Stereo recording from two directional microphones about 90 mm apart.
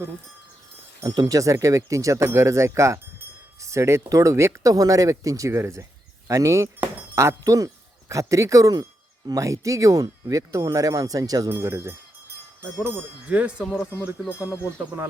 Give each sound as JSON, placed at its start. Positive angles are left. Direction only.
{"t": 1.0, "sound": "speech", "side_deg": -45}
{"t": 6.7, "sound": "cutlery", "side_deg": -15}
{"t": 7.2, "sound": "speech", "side_deg": -35}
{"t": 11.4, "sound": "speech", "side_deg": -30}
{"t": 12.8, "sound": "cowbell", "side_deg": -15}